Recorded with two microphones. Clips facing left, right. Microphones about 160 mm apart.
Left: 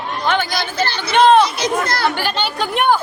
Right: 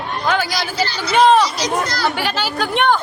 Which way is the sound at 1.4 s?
55° left (ahead or behind).